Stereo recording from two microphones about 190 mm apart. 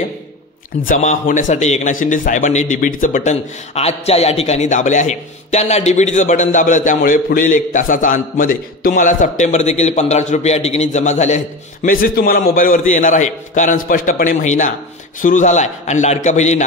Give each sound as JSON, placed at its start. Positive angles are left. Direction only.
{"t": 0.8, "sound": "a man's voice", "side_deg": 45}